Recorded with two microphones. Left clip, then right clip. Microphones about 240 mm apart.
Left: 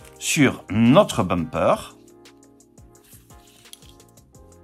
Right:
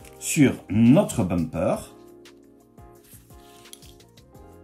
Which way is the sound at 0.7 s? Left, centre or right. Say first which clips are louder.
Left 6 dB; left.